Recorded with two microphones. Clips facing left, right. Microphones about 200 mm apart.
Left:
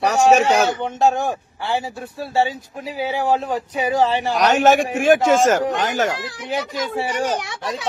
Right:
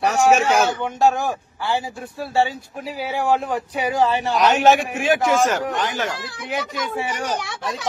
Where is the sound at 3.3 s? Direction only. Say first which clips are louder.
Right 2 dB; 25° left (ahead or behind).